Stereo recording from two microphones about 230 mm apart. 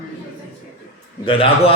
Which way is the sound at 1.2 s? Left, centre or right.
Left.